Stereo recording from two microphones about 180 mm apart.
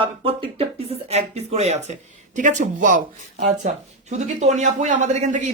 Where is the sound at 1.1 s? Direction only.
35° right (ahead or behind).